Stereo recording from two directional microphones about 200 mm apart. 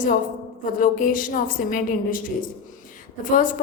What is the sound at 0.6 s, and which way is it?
Speech, 40° left (ahead or behind).